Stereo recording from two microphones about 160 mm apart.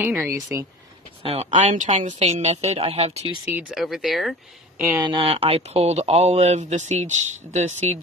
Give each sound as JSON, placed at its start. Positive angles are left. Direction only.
{"t": 0.0, "sound": "speech", "side_deg": -15}
{"t": 1.2, "sound": "speech", "side_deg": -40}
{"t": 3.4, "sound": "speech", "side_deg": -5}
{"t": 4.9, "sound": "speech", "side_deg": -30}